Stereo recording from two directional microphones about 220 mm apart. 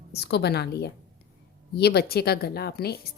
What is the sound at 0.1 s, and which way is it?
A woman's voice, 50° left (ahead or behind).